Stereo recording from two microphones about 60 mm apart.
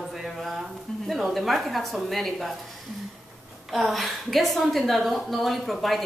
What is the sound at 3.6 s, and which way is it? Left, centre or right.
A woman's voice, centre.